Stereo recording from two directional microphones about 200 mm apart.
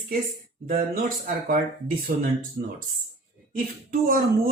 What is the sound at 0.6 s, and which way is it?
Speech, 40° right (ahead or behind).